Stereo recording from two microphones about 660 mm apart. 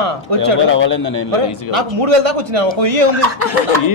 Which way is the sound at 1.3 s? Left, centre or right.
Right.